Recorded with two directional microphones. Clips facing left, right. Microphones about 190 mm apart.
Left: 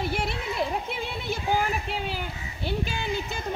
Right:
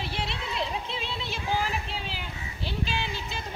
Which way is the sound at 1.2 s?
50° left (ahead or behind).